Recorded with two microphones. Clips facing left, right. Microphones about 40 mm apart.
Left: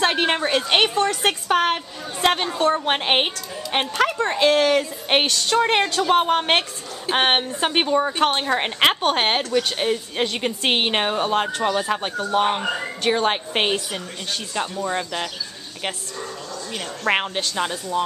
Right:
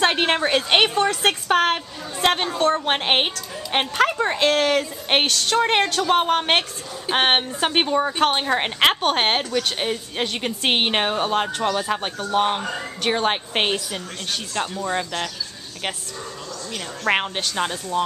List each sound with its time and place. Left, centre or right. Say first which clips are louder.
0.0 s a woman's voice: right 1 dB; centre
17.0 s a woman's voice: even; centre